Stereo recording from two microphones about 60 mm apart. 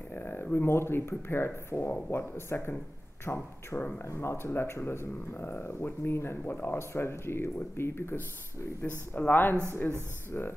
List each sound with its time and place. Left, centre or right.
0.1 s speech: left
4.0 s speech: left